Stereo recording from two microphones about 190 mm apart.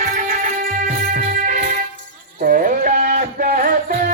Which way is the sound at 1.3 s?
45° right (ahead or behind).